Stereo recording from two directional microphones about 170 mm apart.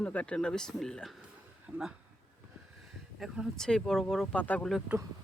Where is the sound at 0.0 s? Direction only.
5° left (ahead or behind).